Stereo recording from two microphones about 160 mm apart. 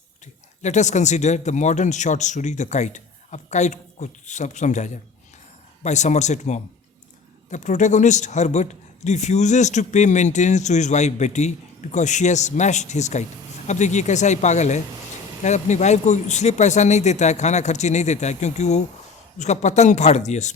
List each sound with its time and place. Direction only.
0.6 s a man's voice: 45° left (ahead or behind)